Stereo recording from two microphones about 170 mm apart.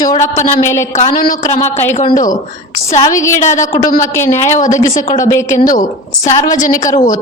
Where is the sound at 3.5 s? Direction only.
45° left (ahead or behind).